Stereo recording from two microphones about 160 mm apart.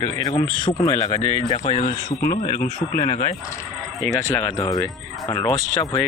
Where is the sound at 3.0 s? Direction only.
45° left (ahead or behind).